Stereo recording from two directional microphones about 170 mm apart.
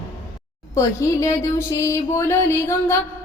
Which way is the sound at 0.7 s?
20° left (ahead or behind).